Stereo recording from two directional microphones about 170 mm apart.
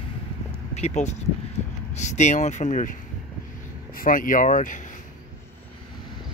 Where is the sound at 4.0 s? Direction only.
55° left (ahead or behind).